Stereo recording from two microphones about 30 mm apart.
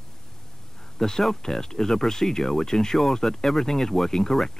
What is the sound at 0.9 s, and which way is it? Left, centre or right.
Speech, centre.